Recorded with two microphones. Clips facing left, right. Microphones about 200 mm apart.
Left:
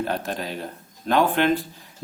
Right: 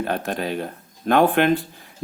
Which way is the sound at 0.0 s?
55° right (ahead or behind).